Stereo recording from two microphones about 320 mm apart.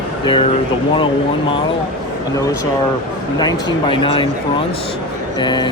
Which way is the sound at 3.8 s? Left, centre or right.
Centre.